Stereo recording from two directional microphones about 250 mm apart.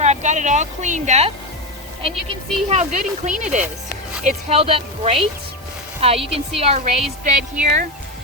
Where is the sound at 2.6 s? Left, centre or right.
Right.